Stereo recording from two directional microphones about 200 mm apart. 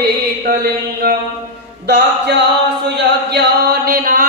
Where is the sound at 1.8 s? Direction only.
55° right (ahead or behind).